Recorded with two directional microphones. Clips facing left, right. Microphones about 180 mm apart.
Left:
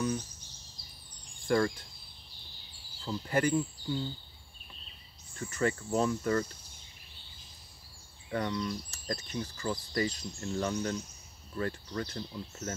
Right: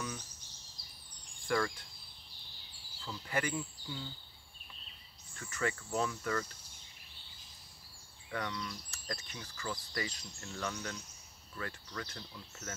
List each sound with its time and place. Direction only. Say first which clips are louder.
1.5 s speech: left 6 dB; 35° left (ahead or behind)
3.1 s speech: left 8 dB; 40° left (ahead or behind)
5.4 s speech: left 6 dB; 35° left (ahead or behind)
8.3 s speech: left 7 dB; 30° left (ahead or behind)